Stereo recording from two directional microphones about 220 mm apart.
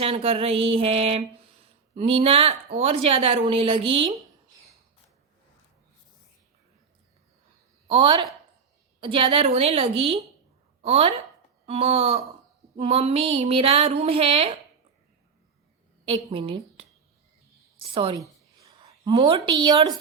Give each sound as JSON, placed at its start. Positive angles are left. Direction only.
{"t": 0.0, "sound": "speech", "side_deg": -25}
{"t": 7.9, "sound": "speech", "side_deg": -25}
{"t": 16.3, "sound": "speech", "side_deg": -25}
{"t": 17.9, "sound": "a woman's voice", "side_deg": -25}
{"t": 18.6, "sound": "a sound", "side_deg": -15}
{"t": 19.1, "sound": "speech", "side_deg": -25}